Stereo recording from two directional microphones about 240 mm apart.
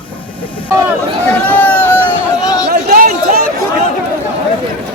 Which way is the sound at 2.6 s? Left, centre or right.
Right.